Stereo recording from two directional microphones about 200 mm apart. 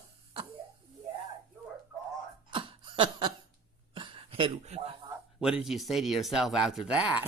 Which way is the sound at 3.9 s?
25° right (ahead or behind).